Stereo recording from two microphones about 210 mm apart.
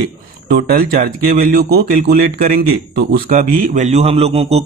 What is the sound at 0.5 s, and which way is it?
Speech, 45° right (ahead or behind).